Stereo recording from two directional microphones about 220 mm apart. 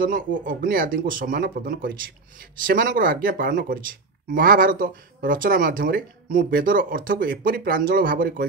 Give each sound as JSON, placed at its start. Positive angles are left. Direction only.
{"t": 0.0, "sound": "speech", "side_deg": -40}